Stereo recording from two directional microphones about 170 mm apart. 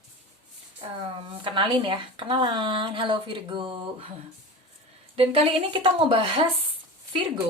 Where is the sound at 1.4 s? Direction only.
30° right (ahead or behind).